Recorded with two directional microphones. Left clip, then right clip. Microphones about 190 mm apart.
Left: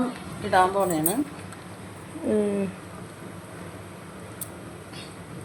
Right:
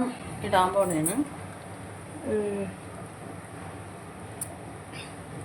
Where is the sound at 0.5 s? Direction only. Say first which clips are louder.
Left 2 dB; 10° left (ahead or behind).